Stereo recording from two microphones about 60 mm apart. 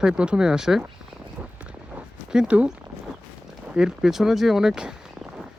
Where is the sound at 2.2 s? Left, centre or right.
Centre.